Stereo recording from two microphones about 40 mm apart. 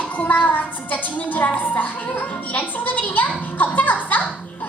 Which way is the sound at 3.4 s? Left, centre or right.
Left.